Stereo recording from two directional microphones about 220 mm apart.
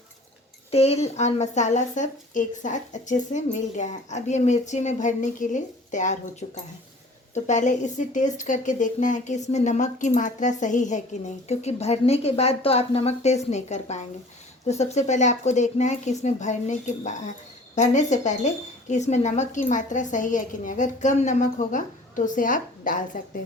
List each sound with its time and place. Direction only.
0.7 s speech: 30° left (ahead or behind)